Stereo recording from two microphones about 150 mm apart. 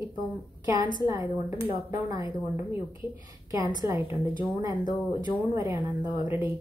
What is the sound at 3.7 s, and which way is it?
A woman's voice, 20° right (ahead or behind).